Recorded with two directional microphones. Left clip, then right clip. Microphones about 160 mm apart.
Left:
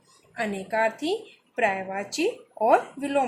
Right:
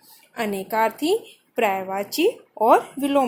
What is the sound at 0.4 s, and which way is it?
Speech, 45° right (ahead or behind).